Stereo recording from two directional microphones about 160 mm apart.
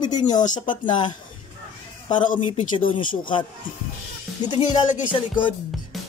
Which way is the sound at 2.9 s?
30° left (ahead or behind).